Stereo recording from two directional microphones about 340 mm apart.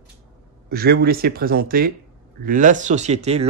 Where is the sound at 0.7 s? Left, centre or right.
Right.